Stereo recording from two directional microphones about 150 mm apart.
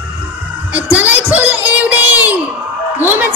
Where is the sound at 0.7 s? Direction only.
10° right (ahead or behind).